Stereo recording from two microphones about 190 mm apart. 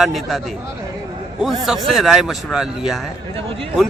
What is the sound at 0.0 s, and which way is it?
Speech, centre (ahead or behind).